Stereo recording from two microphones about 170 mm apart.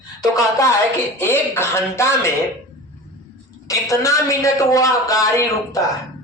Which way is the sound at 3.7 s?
20° left (ahead or behind).